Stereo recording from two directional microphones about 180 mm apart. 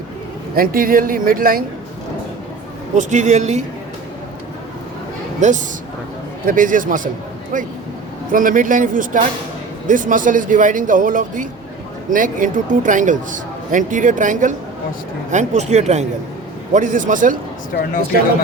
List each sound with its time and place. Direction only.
0.5 s speech: 55° right (ahead or behind)
2.9 s speech: 40° right (ahead or behind)
5.4 s speech: 40° right (ahead or behind)
17.7 s speech: 55° left (ahead or behind)